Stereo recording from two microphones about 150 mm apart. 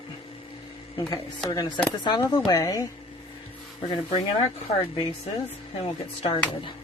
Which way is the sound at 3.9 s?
35° left (ahead or behind).